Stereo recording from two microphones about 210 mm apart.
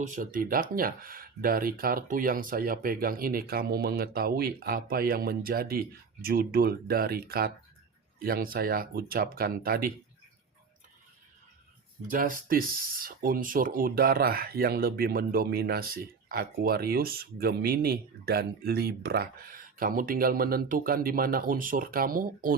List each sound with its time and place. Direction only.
0.0 s speech: 40° right (ahead or behind)
12.0 s speech: 40° right (ahead or behind)